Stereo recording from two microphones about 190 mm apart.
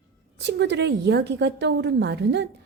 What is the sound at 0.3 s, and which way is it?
A woman's voice, 65° right (ahead or behind).